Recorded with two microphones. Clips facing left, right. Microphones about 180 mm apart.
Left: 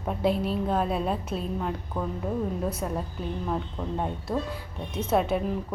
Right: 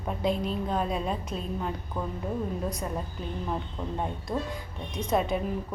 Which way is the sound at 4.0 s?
5° left (ahead or behind).